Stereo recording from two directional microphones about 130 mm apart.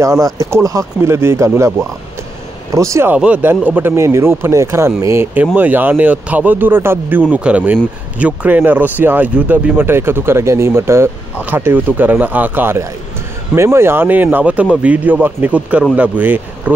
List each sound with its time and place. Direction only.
0.2 s speech: 25° right (ahead or behind)
2.7 s speech: 25° right (ahead or behind)